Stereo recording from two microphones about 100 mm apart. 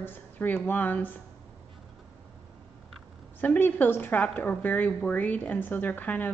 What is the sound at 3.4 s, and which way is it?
Speech, 20° left (ahead or behind).